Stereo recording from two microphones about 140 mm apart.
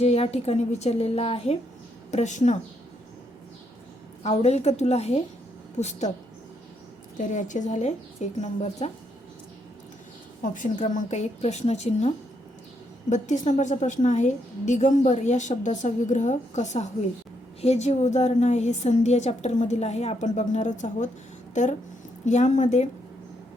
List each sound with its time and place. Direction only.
0.0 s a woman's voice: 50° left (ahead or behind)
2.0 s a woman's voice: 55° left (ahead or behind)
4.2 s a woman's voice: 50° left (ahead or behind)
7.2 s a woman's voice: 65° left (ahead or behind)
10.4 s a woman's voice: 65° left (ahead or behind)